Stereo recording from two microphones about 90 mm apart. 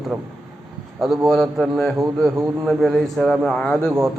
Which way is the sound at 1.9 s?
30° right (ahead or behind).